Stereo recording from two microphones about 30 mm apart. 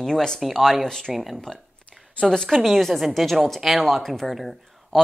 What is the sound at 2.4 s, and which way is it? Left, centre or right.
Speech, centre.